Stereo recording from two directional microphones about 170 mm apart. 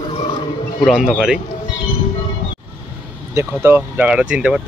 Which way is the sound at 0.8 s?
Centre (ahead or behind).